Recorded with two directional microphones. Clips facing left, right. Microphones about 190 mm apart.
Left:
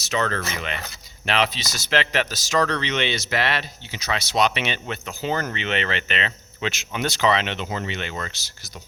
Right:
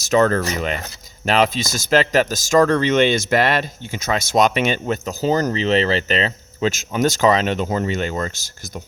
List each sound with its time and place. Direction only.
0.0 s speech: 45° right (ahead or behind)